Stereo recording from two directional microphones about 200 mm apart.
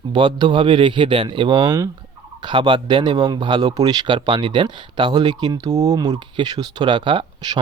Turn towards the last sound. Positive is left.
turn(degrees=-20)  # may be behind; listen again after turning